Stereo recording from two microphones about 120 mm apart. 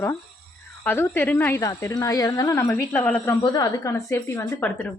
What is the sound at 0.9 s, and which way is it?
A woman's voice, 20° left (ahead or behind).